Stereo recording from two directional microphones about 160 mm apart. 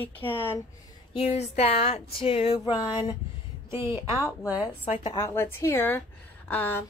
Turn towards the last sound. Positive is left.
turn(degrees=15)  # may be behind; listen again after turning